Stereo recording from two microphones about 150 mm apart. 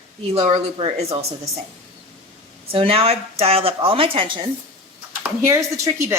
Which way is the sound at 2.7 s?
40° right (ahead or behind).